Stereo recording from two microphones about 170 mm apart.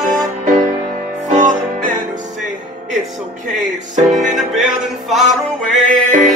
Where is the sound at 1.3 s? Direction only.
50° right (ahead or behind).